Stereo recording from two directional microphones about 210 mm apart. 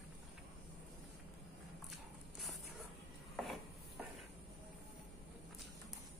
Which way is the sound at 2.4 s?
Centre (ahead or behind).